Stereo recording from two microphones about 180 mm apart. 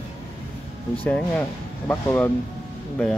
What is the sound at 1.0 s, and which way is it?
Speech, 5° left (ahead or behind).